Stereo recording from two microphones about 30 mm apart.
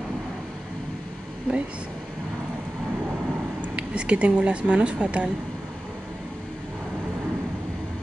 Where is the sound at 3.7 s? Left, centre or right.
Right.